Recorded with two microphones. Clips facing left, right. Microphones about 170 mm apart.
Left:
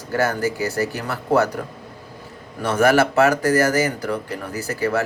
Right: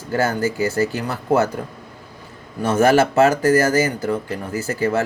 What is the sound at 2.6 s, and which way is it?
Speech, 25° right (ahead or behind).